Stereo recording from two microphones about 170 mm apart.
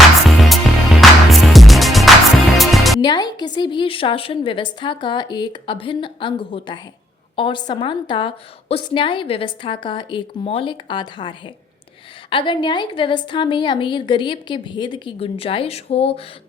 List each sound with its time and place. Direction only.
0.3 s music: centre (ahead or behind)
3.0 s a woman's voice: 25° left (ahead or behind)